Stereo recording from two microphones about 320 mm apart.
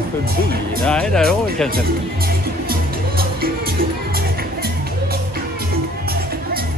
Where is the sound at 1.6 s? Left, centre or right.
Right.